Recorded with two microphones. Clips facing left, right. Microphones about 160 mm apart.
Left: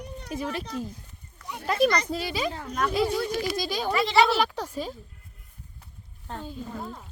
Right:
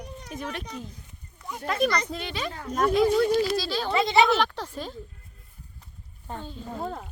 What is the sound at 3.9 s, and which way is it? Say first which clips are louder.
Speech: right 1 dB; 20° right (ahead or behind).